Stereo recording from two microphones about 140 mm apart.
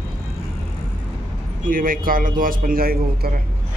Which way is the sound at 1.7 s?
80° right.